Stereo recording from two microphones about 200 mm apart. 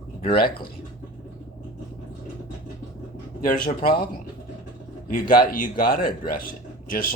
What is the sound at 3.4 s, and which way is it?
Speech, 45° left (ahead or behind).